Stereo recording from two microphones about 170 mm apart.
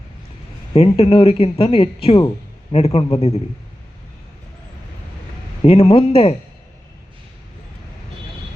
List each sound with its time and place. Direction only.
0.7 s speech: 35° left (ahead or behind)
5.6 s speech: 35° left (ahead or behind)